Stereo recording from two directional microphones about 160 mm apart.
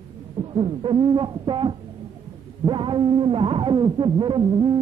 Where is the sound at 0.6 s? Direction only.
35° right (ahead or behind).